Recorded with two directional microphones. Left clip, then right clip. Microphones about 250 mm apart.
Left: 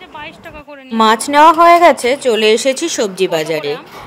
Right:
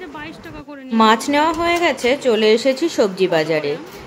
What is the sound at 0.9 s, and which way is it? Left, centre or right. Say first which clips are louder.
A woman's voice: left 2 dB; left.